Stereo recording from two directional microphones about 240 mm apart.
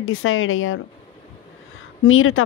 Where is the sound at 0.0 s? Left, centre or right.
Left.